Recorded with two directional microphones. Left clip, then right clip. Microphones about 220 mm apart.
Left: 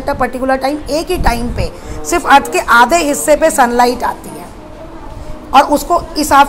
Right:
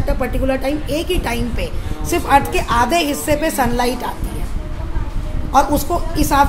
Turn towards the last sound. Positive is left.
turn(degrees=15)  # may be behind; listen again after turning